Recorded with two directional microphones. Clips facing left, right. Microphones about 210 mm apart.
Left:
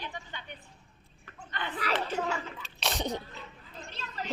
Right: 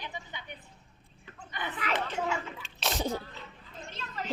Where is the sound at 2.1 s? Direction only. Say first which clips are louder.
Even; 40° left (ahead or behind).